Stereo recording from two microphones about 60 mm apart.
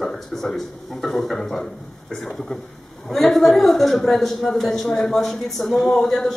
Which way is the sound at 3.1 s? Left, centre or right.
Centre.